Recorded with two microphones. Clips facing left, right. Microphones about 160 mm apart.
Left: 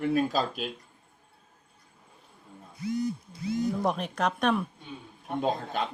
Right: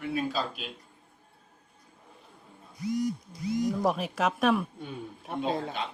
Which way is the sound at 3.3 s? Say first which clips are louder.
Even; 25° left (ahead or behind).